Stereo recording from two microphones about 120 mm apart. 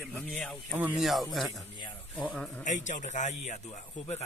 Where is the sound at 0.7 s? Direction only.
10° right (ahead or behind).